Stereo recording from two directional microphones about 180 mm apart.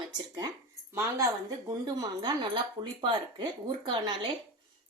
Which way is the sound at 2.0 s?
25° right (ahead or behind).